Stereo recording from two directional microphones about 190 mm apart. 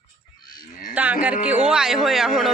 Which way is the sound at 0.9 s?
10° right (ahead or behind).